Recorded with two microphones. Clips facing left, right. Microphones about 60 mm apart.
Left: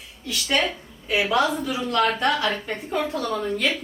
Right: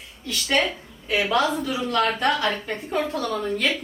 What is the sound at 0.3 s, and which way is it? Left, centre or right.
A woman's voice, centre.